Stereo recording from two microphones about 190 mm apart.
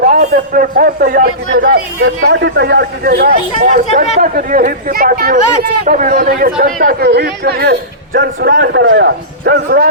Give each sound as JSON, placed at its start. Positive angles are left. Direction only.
{"t": 0.0, "sound": "a man's voice", "side_deg": -40}
{"t": 3.6, "sound": "a man's voice", "side_deg": -40}